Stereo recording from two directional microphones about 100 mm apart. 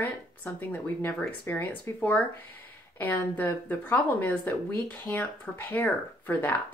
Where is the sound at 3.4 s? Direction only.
20° left (ahead or behind).